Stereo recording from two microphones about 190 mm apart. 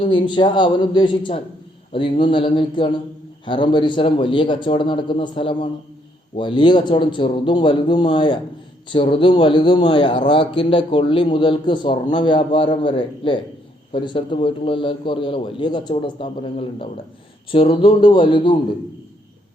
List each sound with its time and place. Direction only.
0.0 s a man's voice: 25° left (ahead or behind)